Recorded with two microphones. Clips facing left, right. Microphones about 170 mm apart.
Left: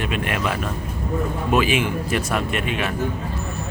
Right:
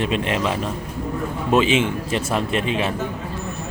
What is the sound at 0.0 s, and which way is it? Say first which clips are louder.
Speech: right 3 dB; 25° right (ahead or behind).